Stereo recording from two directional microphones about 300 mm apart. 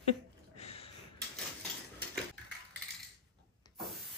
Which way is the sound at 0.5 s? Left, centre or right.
Left.